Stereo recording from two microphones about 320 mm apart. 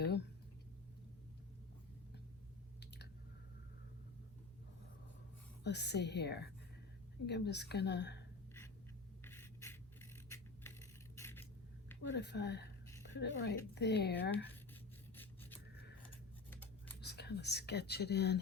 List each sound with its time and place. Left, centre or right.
0.0 s a sound: left
2.8 s clicking: left
5.6 s a woman's voice: left
9.2 s writing: centre
10.2 s a sound: centre
12.1 s a woman's voice: left
14.5 s a sound: centre
15.7 s scissors: left
17.0 s speech: left